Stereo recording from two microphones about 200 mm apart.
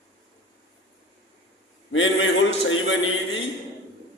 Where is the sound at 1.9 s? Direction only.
70° left (ahead or behind).